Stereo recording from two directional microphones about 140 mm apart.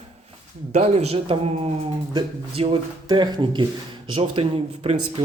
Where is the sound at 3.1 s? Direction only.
30° right (ahead or behind).